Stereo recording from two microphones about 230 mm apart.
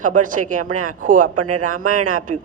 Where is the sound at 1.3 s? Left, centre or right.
Right.